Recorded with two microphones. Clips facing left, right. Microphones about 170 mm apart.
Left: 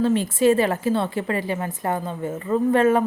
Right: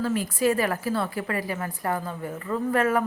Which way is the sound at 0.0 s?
25° left (ahead or behind).